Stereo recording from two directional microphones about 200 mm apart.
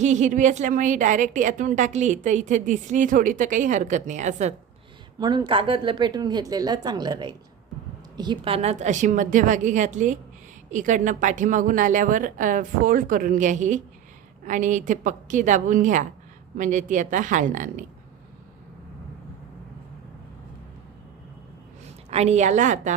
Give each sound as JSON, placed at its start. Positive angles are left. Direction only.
{"t": 0.0, "sound": "a woman's voice", "side_deg": -35}
{"t": 5.2, "sound": "a woman's voice", "side_deg": -20}
{"t": 22.1, "sound": "a woman's voice", "side_deg": -35}